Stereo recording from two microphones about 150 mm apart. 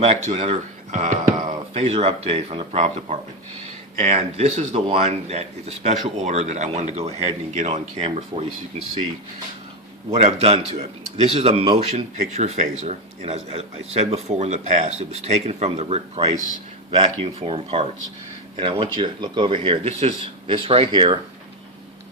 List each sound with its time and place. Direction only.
0.0 s speech: 40° right (ahead or behind)
10.2 s speech: 45° right (ahead or behind)
13.2 s speech: 40° right (ahead or behind)